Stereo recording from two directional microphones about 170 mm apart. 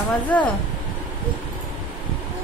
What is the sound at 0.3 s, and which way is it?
Speech, 5° left (ahead or behind).